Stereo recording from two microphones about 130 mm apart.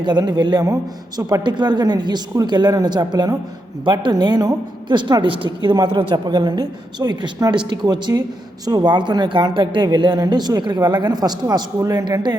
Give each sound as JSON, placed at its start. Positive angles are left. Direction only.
{"t": 0.0, "sound": "a woman's voice", "side_deg": -35}